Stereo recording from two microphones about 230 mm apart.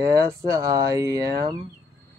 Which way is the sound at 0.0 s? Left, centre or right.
Centre.